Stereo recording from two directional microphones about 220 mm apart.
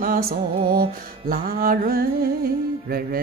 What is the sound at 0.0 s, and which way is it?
Music, 40° right (ahead or behind).